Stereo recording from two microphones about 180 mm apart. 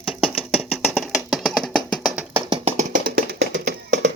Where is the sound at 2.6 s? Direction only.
45° right (ahead or behind); by 4.1 s 80° right.